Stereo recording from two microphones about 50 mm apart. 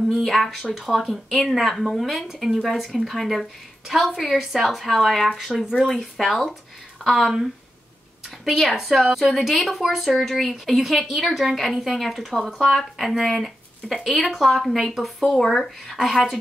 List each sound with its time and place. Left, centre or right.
0.1 s speech: centre
8.5 s speech: centre